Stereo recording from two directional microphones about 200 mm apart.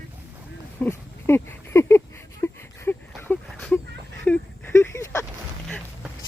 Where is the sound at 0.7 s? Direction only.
10° left (ahead or behind).